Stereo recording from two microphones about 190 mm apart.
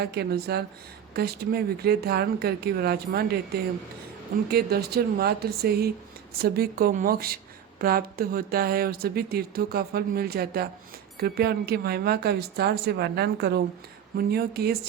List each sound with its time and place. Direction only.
0.0 s speech: 55° right (ahead or behind)